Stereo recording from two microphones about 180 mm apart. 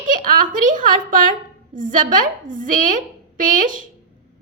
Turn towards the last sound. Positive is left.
turn(degrees=-50)  # may be behind; listen again after turning